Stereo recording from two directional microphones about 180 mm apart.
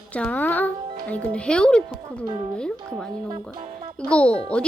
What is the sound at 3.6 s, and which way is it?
Music, 35° right (ahead or behind).